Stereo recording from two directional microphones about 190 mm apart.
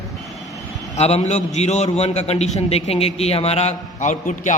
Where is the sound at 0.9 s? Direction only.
35° left (ahead or behind).